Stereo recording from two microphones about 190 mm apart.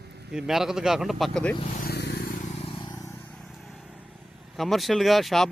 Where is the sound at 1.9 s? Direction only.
60° left (ahead or behind).